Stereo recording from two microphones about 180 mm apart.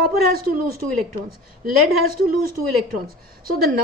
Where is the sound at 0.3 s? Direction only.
55° right (ahead or behind).